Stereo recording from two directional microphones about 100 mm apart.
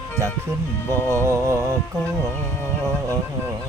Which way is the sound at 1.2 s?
30° right (ahead or behind).